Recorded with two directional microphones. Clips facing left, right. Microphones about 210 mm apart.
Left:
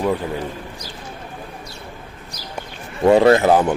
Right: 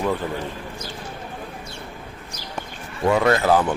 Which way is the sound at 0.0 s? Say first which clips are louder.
Left 3 dB; 10° left (ahead or behind).